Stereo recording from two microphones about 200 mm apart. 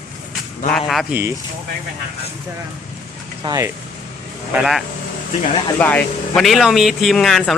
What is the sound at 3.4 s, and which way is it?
Speech, 15° right (ahead or behind).